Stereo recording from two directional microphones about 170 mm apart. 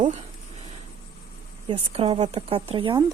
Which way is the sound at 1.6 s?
35° right (ahead or behind).